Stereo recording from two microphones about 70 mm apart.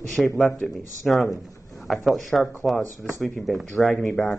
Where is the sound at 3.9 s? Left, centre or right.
Left.